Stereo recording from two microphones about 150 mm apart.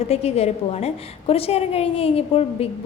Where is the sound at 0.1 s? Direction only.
45° left (ahead or behind).